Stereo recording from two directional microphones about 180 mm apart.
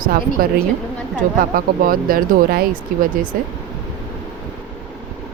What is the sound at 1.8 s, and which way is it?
Speech, 55° right (ahead or behind).